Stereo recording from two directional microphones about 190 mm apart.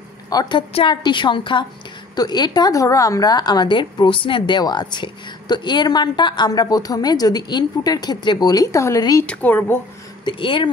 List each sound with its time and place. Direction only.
0.3 s a woman's voice: 20° left (ahead or behind)
9.2 s speech: 5° left (ahead or behind)
10.2 s a woman's voice: 25° left (ahead or behind)